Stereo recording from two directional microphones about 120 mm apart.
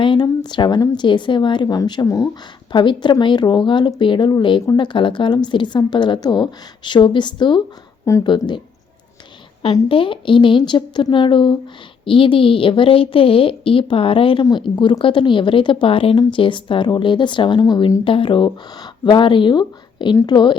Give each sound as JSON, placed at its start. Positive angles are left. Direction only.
{"t": 0.0, "sound": "speech", "side_deg": 40}
{"t": 9.9, "sound": "a woman's voice", "side_deg": 45}